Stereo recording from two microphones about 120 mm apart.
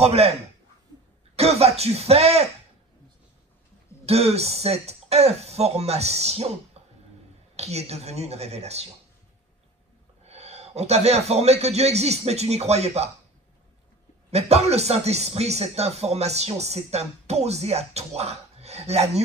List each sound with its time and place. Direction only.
0.0 s speech: 60° right (ahead or behind)
1.3 s speech: 60° right (ahead or behind)
4.0 s speech: 60° right (ahead or behind)
10.2 s speech: 60° right (ahead or behind)
14.3 s speech: 65° right (ahead or behind)